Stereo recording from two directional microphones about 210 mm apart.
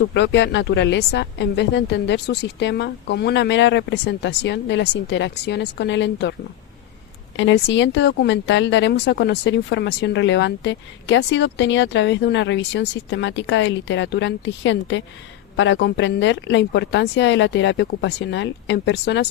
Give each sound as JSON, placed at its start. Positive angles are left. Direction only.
{"t": 0.1, "sound": "speech", "side_deg": 55}
{"t": 7.3, "sound": "speech", "side_deg": 60}